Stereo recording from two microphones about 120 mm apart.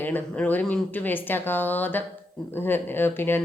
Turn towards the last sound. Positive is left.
turn(degrees=20)  # may be behind; listen again after turning